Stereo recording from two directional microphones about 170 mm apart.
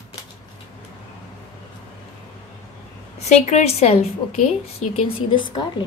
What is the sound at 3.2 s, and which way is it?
A woman's voice, 40° left (ahead or behind).